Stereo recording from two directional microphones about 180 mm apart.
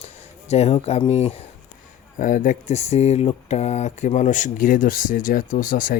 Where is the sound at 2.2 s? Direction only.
45° left (ahead or behind).